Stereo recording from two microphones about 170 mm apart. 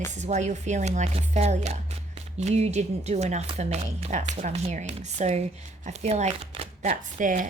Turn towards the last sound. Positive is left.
turn(degrees=-50)  # may be behind; listen again after turning